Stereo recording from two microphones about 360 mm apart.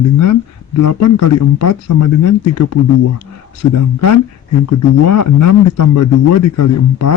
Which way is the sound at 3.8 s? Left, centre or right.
Left.